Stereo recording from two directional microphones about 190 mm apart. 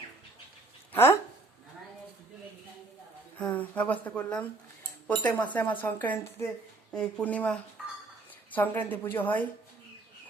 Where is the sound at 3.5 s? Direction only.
10° left (ahead or behind).